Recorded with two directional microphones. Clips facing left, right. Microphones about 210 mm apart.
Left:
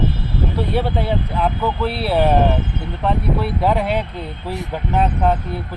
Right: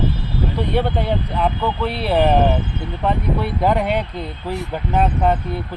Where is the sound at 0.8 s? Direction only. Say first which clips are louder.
Right 1 dB; 5° left (ahead or behind).